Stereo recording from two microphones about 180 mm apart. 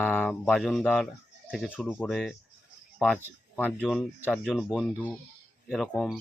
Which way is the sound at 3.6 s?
5° left (ahead or behind).